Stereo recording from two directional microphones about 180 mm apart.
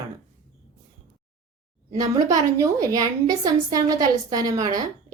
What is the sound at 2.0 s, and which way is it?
A woman's voice, 20° right (ahead or behind).